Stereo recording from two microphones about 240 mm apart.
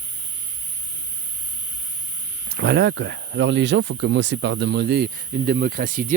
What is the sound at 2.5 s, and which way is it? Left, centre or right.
Speech, right.